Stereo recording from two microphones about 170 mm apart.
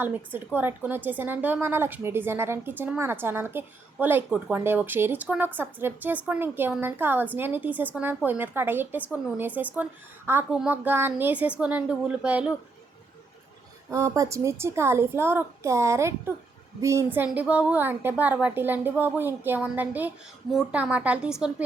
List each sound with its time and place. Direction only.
0.0 s a woman's voice: 10° right (ahead or behind)
13.9 s a woman's voice: 20° right (ahead or behind)